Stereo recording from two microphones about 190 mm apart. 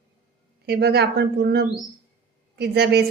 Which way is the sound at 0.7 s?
60° right (ahead or behind).